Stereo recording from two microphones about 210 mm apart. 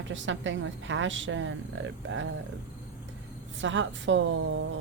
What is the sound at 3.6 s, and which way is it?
Speech, 60° right (ahead or behind).